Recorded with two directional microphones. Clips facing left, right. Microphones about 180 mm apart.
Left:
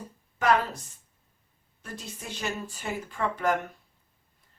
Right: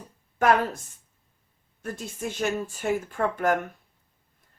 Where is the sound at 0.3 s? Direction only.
50° right (ahead or behind).